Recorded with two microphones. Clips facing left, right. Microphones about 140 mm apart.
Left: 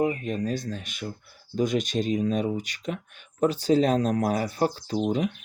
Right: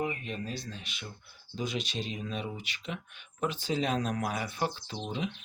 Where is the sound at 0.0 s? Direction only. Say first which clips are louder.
Left 9 dB; 40° left (ahead or behind).